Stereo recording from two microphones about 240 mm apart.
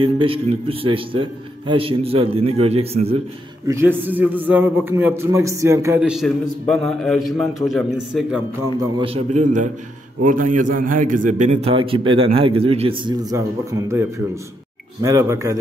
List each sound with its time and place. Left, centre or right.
0.0 s a man's voice: right
3.6 s a man's voice: centre
9.0 s a man's voice: right